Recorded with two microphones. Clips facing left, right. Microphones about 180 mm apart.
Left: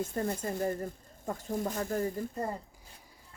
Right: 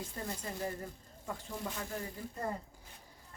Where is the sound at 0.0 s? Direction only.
50° left (ahead or behind).